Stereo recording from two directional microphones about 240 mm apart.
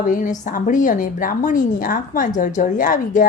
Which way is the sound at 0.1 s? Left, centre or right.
Left.